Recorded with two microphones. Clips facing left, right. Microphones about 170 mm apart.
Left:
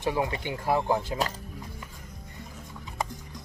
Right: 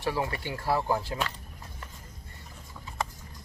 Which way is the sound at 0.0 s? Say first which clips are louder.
Left 2 dB; 20° left (ahead or behind).